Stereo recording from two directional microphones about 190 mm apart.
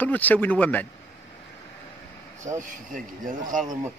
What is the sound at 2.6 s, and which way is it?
Speech, 45° right (ahead or behind).